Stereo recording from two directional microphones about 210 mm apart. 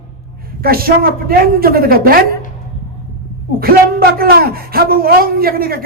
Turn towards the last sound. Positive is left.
turn(degrees=-45)  # may be behind; listen again after turning